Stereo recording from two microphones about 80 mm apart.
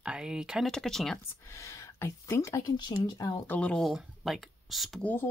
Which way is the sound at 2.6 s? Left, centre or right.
Left.